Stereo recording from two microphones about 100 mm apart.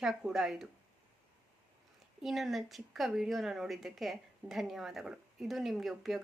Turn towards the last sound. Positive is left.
turn(degrees=0)  # may be behind; listen again after turning